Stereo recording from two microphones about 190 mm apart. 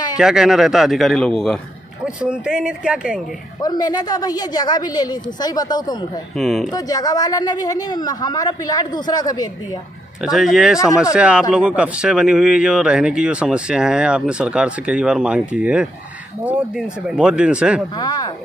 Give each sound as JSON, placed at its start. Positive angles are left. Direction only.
{"t": 0.2, "sound": "speech", "side_deg": -5}
{"t": 3.6, "sound": "speech", "side_deg": 20}
{"t": 6.3, "sound": "speech", "side_deg": 0}
{"t": 6.7, "sound": "speech", "side_deg": 20}
{"t": 10.2, "sound": "speech", "side_deg": 0}
{"t": 17.9, "sound": "speech", "side_deg": 20}